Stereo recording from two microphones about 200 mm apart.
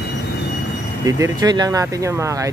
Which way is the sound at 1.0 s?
15° right (ahead or behind).